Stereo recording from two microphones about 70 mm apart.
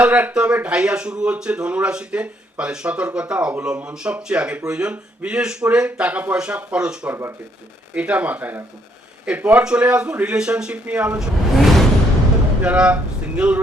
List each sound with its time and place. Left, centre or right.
0.0 s speech: centre
7.1 s speech: right
7.9 s speech: centre
11.5 s music: centre
12.6 s speech: centre